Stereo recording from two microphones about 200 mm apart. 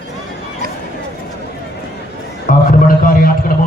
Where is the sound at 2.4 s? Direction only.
45° left (ahead or behind).